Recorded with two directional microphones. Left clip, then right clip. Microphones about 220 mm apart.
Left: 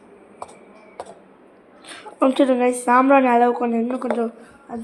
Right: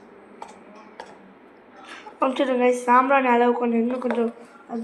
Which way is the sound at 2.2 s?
45° left (ahead or behind).